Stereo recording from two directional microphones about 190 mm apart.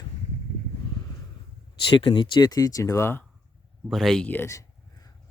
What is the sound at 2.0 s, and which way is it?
Speech, 25° left (ahead or behind).